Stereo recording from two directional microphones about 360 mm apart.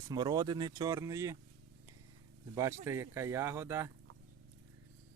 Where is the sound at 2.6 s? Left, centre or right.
Centre.